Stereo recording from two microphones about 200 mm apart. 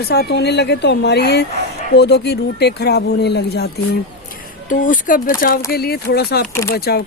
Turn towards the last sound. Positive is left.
turn(degrees=55)  # may be behind; listen again after turning